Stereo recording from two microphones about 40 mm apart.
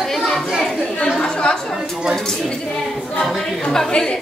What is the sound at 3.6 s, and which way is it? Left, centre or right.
Speech, centre.